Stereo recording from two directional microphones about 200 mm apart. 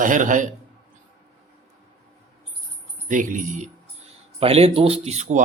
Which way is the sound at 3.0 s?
40° right (ahead or behind).